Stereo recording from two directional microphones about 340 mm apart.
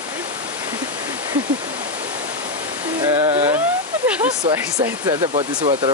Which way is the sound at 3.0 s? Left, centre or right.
Centre.